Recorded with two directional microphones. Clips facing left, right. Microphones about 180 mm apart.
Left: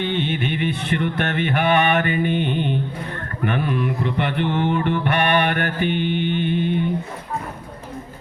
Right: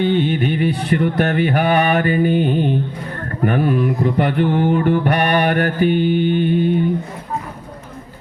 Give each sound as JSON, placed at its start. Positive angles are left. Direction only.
{"t": 0.0, "sound": "mantra", "side_deg": -40}